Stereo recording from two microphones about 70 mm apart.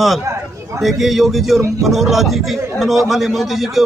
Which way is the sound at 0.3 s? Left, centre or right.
Right.